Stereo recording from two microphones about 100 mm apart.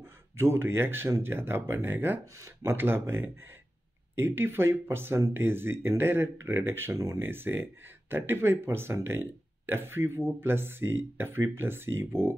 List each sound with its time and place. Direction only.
0.0 s speech: 25° right (ahead or behind)
6.9 s speech: 35° right (ahead or behind)
7.2 s speech: 20° right (ahead or behind)